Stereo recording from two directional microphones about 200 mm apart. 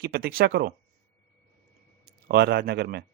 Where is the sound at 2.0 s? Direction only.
50° right (ahead or behind).